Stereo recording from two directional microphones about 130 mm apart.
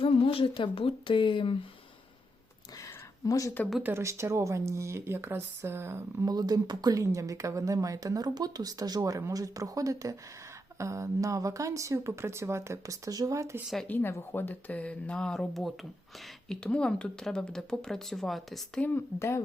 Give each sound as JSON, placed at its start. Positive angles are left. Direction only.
{"t": 0.0, "sound": "speech", "side_deg": 45}
{"t": 3.2, "sound": "speech", "side_deg": 25}
{"t": 3.8, "sound": "speech", "side_deg": -20}
{"t": 6.3, "sound": "speech", "side_deg": -30}
{"t": 13.8, "sound": "speech", "side_deg": 15}